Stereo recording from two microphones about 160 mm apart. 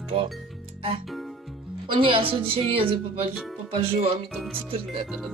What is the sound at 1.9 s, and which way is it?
A woman's voice, 35° right (ahead or behind).